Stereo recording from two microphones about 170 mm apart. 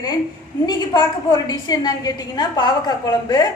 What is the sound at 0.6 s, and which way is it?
A woman's voice, 25° left (ahead or behind).